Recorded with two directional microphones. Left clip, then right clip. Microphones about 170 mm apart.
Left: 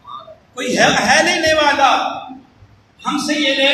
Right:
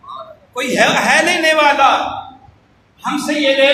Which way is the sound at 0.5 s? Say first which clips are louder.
Right 1 dB; 15° right (ahead or behind).